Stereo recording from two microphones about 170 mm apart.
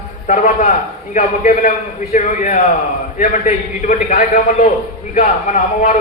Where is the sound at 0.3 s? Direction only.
50° left (ahead or behind).